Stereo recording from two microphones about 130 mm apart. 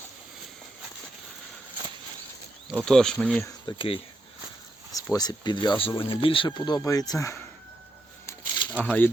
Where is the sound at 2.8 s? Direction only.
5° left (ahead or behind).